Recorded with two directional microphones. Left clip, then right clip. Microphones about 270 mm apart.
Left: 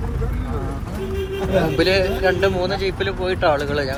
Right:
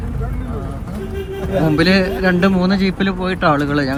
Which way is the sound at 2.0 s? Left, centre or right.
Right.